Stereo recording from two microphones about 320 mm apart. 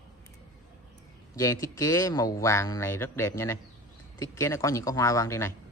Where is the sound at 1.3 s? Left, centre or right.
Centre.